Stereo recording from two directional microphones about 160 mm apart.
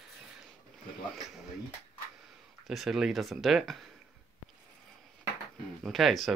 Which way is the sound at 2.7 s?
Centre (ahead or behind).